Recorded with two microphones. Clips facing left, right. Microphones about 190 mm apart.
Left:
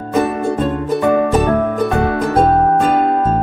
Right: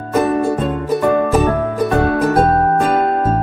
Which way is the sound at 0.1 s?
Centre (ahead or behind).